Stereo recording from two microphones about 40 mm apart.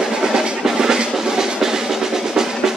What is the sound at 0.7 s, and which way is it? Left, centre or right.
Drum, centre.